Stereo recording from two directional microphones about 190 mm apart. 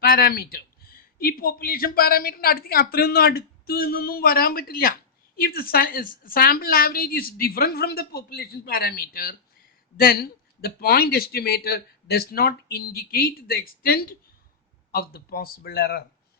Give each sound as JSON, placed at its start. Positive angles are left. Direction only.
{"t": 0.0, "sound": "a woman's voice", "side_deg": 55}